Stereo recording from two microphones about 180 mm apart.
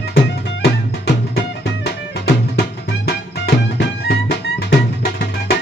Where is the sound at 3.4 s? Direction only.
65° left (ahead or behind).